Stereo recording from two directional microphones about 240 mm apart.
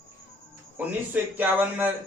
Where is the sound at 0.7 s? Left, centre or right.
Centre.